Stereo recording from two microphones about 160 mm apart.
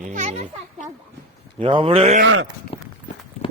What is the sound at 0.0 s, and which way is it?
Speech, 50° right (ahead or behind).